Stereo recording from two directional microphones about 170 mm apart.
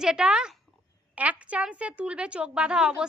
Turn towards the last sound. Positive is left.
turn(degrees=-5)  # may be behind; listen again after turning